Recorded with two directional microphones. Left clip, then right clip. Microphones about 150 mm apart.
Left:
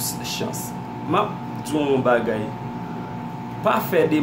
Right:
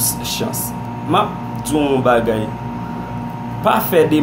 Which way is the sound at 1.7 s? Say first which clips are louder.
Right 5 dB; 5° left (ahead or behind).